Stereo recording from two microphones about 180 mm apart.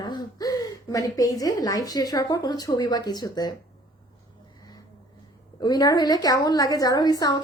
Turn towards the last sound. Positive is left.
turn(degrees=20)  # may be behind; listen again after turning